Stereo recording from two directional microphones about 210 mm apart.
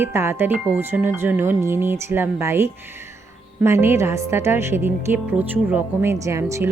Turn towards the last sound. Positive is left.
turn(degrees=-15)  # may be behind; listen again after turning